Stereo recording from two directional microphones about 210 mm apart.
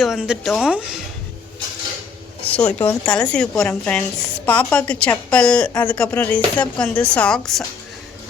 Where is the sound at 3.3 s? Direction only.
5° left (ahead or behind).